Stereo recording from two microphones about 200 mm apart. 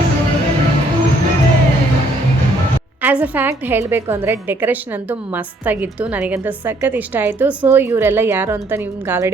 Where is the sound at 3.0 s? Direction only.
10° right (ahead or behind).